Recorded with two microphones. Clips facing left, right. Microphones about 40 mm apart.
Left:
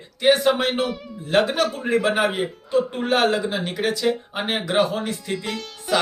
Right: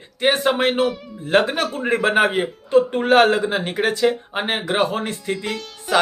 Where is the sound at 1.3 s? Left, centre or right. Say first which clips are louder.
Right 1 dB; right.